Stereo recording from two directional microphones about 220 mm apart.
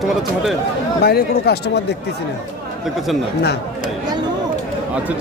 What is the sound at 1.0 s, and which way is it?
Speech, 45° left (ahead or behind).